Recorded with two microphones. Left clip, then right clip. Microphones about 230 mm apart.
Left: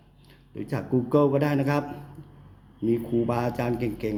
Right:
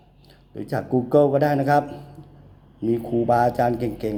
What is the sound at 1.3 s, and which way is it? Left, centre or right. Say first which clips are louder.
Speech: right 6 dB; centre.